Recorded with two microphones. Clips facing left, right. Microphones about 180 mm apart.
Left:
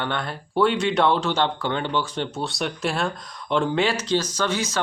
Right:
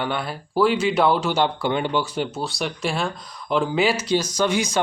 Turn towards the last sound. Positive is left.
turn(degrees=-15)  # may be behind; listen again after turning